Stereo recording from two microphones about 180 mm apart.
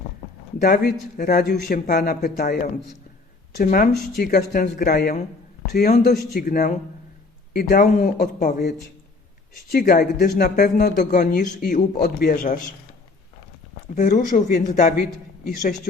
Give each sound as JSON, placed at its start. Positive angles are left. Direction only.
{"t": 0.6, "sound": "speech", "side_deg": 60}
{"t": 1.1, "sound": "speech", "side_deg": 45}
{"t": 9.6, "sound": "speech", "side_deg": 55}
{"t": 12.3, "sound": "speech", "side_deg": 45}
{"t": 13.9, "sound": "speech", "side_deg": 45}